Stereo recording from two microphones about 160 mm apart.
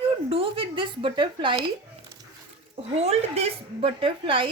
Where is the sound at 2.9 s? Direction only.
40° right (ahead or behind).